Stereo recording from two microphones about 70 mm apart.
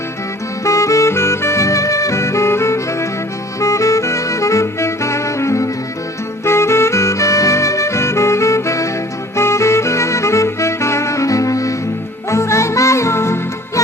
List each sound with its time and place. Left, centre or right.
0.6 s saxophone: left
6.4 s music: left